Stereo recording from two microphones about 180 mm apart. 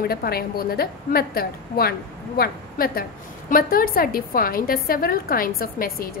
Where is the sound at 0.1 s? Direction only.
55° left (ahead or behind).